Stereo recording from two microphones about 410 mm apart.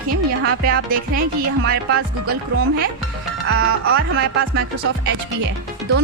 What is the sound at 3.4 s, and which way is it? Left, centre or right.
Music, right.